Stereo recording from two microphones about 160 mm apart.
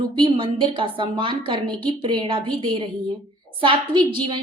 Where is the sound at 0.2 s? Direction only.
30° right (ahead or behind).